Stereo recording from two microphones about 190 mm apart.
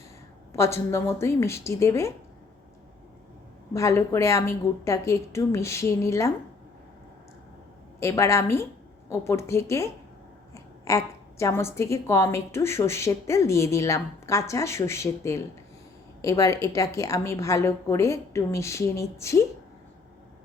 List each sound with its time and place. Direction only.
0.5 s a woman's voice: 15° left (ahead or behind)
3.7 s a woman's voice: 15° left (ahead or behind)
7.9 s a woman's voice: 15° left (ahead or behind)